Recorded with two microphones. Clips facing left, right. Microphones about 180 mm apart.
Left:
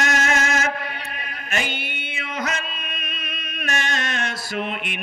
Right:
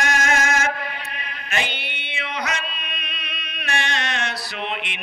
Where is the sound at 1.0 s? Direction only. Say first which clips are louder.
Left 1 dB; 45° left (ahead or behind).